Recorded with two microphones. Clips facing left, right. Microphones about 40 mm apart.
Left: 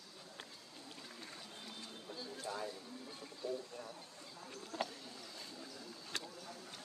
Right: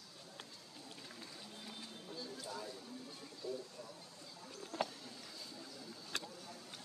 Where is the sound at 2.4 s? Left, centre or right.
Left.